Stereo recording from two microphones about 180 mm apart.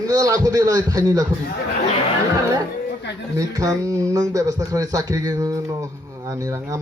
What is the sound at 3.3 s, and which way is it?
A man's voice, 20° right (ahead or behind).